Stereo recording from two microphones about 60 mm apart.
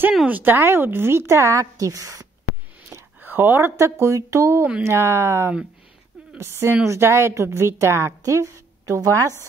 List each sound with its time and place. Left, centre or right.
0.3 s a woman's voice: right
3.2 s a woman's voice: right